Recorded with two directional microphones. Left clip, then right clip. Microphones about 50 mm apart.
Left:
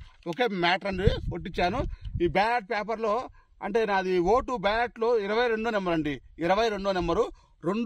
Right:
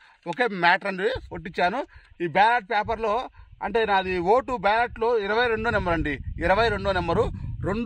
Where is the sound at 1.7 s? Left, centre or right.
Right.